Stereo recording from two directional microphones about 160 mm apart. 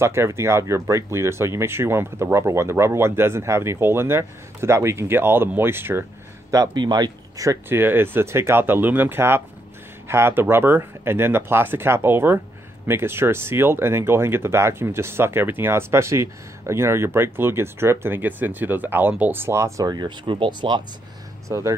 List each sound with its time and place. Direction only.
0.0 s speech: 15° right (ahead or behind)
6.5 s speech: 25° right (ahead or behind)
21.5 s speech: 20° right (ahead or behind)